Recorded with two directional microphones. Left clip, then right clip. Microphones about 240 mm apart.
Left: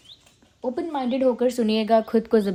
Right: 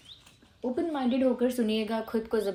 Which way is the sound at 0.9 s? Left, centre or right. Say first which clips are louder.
Left 7 dB; left.